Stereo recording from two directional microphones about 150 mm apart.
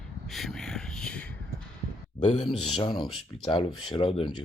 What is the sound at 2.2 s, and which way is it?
Speech, 35° left (ahead or behind).